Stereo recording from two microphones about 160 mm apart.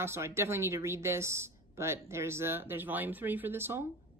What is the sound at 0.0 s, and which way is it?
Speech, 15° right (ahead or behind).